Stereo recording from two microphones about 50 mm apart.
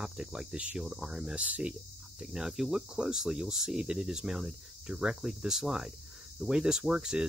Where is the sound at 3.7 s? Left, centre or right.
Centre.